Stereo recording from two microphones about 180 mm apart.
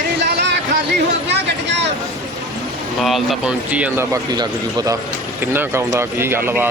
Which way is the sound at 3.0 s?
Centre (ahead or behind).